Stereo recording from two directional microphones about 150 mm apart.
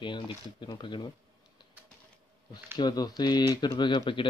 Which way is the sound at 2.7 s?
25° left (ahead or behind).